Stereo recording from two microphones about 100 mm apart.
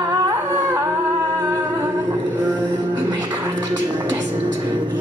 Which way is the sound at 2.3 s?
20° right (ahead or behind).